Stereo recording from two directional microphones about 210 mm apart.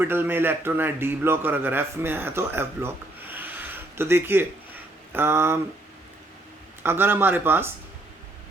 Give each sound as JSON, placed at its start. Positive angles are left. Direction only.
{"t": 0.0, "sound": "a man's voice", "side_deg": -10}
{"t": 6.8, "sound": "a man's voice", "side_deg": -10}